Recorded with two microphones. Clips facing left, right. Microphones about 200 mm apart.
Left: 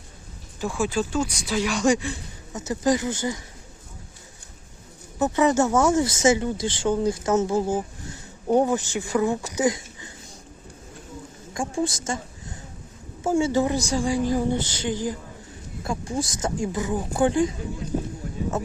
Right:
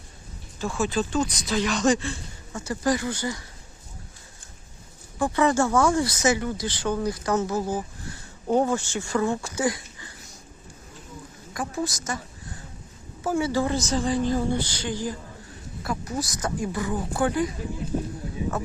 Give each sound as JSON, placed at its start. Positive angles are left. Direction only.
{"t": 0.6, "sound": "speech", "side_deg": 15}
{"t": 5.2, "sound": "speech", "side_deg": 20}
{"t": 11.5, "sound": "speech", "side_deg": 25}
{"t": 13.2, "sound": "speech", "side_deg": 25}